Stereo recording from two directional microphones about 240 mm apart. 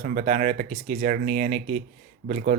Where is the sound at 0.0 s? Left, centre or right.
Right.